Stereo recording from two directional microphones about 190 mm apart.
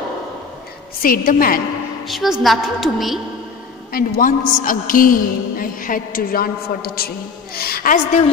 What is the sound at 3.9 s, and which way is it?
A man's voice, 45° left (ahead or behind).